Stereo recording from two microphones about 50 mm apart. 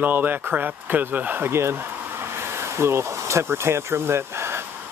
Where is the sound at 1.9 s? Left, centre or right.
Right.